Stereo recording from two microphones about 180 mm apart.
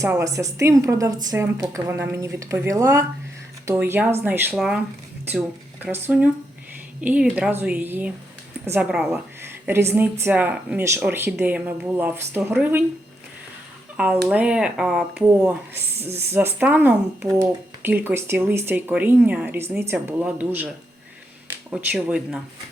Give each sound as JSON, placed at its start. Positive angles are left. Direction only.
{"t": 0.0, "sound": "a woman's voice", "side_deg": -15}
{"t": 13.9, "sound": "a woman's voice", "side_deg": -5}
{"t": 21.7, "sound": "speech", "side_deg": -5}